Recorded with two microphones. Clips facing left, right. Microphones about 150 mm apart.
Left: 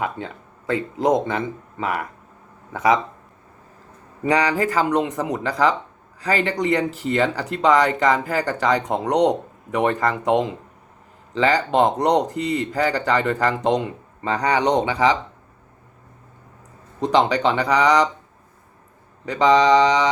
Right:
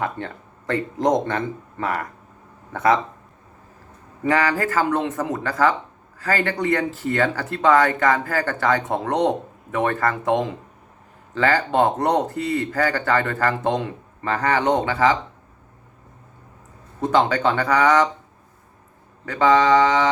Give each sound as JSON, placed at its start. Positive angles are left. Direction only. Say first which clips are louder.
{"t": 0.0, "sound": "speech", "louder": "even", "side_deg": 10}
{"t": 4.3, "sound": "speech", "louder": "left 1 dB", "side_deg": 15}
{"t": 17.0, "sound": "speech", "louder": "left 1 dB", "side_deg": 15}
{"t": 19.2, "sound": "speech", "louder": "left 1 dB", "side_deg": 15}